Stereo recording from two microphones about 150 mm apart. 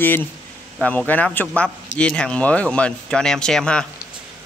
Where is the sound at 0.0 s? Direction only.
15° left (ahead or behind).